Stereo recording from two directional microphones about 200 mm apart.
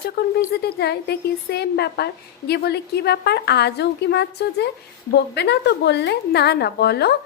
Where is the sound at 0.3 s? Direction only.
55° left (ahead or behind).